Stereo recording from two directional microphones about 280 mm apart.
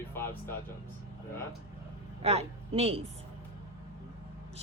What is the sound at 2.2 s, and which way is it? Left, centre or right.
Speech, right.